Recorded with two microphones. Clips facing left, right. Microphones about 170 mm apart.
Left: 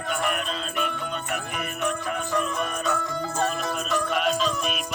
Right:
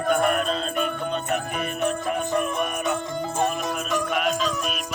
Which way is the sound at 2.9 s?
20° right (ahead or behind).